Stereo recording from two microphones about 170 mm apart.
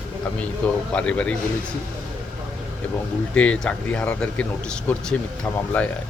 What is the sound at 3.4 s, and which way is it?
Speech, 5° left (ahead or behind).